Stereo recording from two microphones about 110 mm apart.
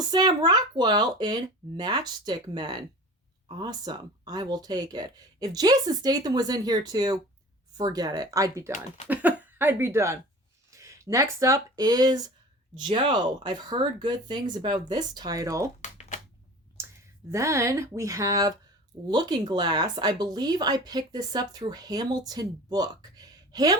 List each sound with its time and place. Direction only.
0.1 s speech: 40° right (ahead or behind)
9.0 s speech: 15° right (ahead or behind); by 15.7 s 30° right (ahead or behind)
16.8 s a sound: 25° right (ahead or behind)
17.2 s speech: 25° right (ahead or behind)
19.0 s speech: 40° right (ahead or behind)